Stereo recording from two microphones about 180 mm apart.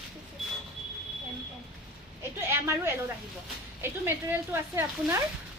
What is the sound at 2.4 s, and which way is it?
Speech, 15° right (ahead or behind).